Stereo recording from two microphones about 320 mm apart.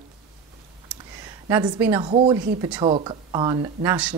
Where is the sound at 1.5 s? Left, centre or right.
Centre.